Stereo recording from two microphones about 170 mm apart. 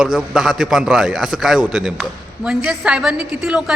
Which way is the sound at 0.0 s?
5° right (ahead or behind).